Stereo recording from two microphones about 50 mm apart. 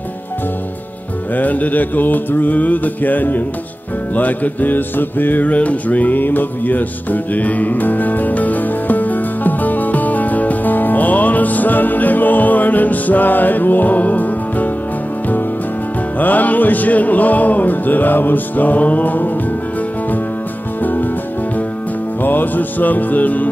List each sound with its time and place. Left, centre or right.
1.3 s music: left
16.2 s music: left
20.8 s music: left
22.2 s music: left